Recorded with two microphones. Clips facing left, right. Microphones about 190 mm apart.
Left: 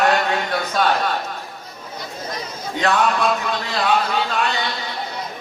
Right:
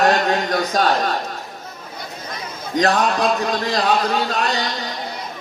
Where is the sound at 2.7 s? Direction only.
40° right (ahead or behind).